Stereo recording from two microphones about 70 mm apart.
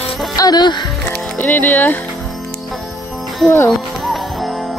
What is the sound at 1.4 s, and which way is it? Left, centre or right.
Speech, left.